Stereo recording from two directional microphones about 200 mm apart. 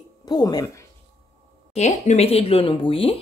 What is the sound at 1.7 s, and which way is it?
Speech, 35° left (ahead or behind).